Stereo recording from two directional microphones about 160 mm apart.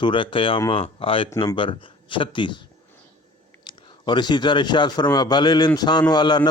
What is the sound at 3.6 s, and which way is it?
A man's voice, 30° left (ahead or behind).